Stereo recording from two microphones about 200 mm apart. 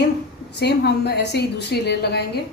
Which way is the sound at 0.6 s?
55° left (ahead or behind).